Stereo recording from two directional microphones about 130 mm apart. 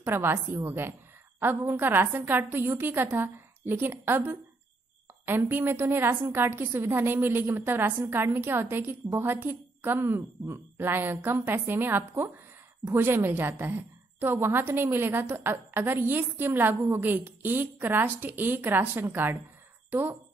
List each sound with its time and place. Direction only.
0.0 s a woman's voice: 15° right (ahead or behind)